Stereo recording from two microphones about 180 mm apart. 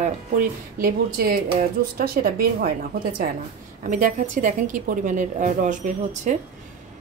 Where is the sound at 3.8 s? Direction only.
50° right (ahead or behind).